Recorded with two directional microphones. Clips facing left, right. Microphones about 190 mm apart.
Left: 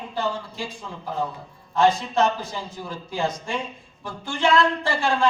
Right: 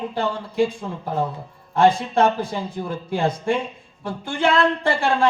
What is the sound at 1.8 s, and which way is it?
Speech, 55° right (ahead or behind).